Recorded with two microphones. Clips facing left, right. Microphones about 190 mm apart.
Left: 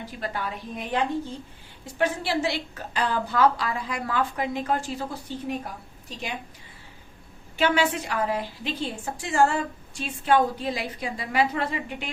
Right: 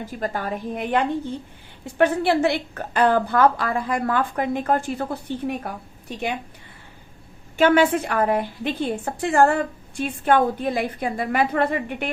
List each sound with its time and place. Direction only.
0.0 s a woman's voice: 45° right (ahead or behind)
7.6 s a woman's voice: 55° right (ahead or behind)